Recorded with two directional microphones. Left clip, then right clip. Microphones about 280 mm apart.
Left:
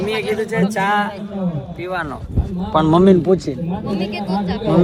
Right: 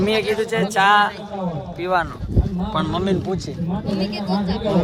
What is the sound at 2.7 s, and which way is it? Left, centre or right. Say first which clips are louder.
Speech: left 10 dB; centre.